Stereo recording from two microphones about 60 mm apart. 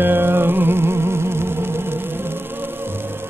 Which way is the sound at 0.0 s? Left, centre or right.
Right.